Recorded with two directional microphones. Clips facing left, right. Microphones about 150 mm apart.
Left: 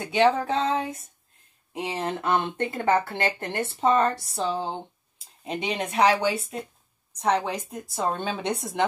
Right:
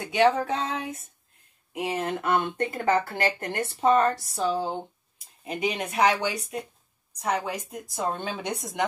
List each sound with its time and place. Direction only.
0.0 s a woman's voice: 25° left (ahead or behind)